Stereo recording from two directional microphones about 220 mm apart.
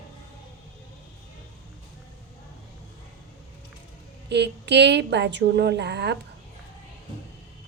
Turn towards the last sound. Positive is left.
turn(degrees=-50)  # may be behind; listen again after turning